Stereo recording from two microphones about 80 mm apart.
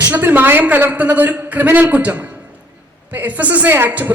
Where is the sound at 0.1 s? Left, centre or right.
Right.